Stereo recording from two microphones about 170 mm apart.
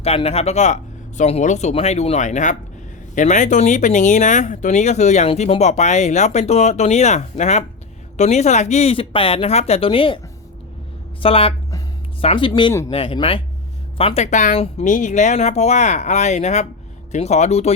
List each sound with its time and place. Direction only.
0.0 s speech: 35° left (ahead or behind)
11.2 s speech: 35° left (ahead or behind)